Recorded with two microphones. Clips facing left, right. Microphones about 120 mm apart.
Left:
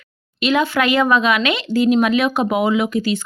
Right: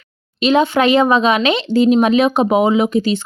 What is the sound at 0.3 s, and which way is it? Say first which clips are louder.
Speech: right 4 dB; 25° right (ahead or behind).